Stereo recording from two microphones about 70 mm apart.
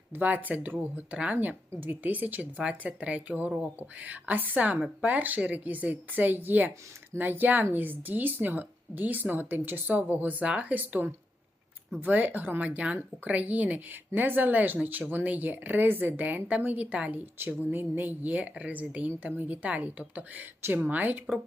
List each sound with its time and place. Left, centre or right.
0.1 s a woman's voice: right